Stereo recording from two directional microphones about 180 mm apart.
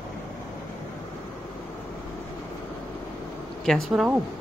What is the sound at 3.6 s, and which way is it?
Speech, centre (ahead or behind).